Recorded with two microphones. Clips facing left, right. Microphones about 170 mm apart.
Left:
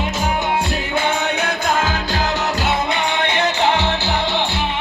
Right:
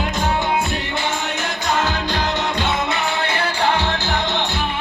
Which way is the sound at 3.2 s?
25° left (ahead or behind).